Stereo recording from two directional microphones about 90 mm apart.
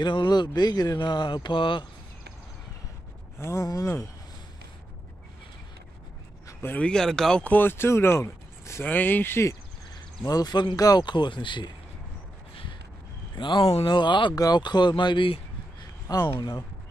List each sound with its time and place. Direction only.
0.0 s speech: 60° left (ahead or behind)
0.6 s speech: 50° left (ahead or behind); by 1.9 s 70° left (ahead or behind)
3.3 s speech: 30° left (ahead or behind)
6.6 s speech: 20° left (ahead or behind)
6.9 s speech: 5° left (ahead or behind)
7.4 s speech: 20° left (ahead or behind)
8.8 s speech: 20° left (ahead or behind)
10.2 s speech: 45° left (ahead or behind)
13.3 s speech: 60° left (ahead or behind)
16.1 s speech: 40° left (ahead or behind)